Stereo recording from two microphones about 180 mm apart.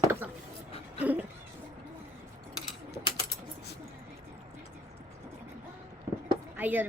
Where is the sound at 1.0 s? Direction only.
10° right (ahead or behind).